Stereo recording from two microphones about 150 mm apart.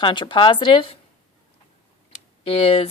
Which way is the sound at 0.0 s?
30° left (ahead or behind).